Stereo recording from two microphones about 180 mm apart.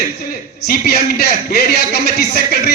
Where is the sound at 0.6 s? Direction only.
55° left (ahead or behind).